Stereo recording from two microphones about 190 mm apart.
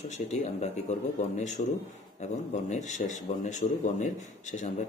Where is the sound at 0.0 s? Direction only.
35° left (ahead or behind).